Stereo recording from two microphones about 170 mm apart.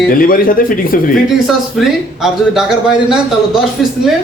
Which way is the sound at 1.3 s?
Centre (ahead or behind).